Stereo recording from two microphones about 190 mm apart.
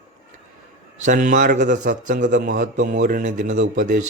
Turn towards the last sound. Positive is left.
turn(degrees=-45)  # may be behind; listen again after turning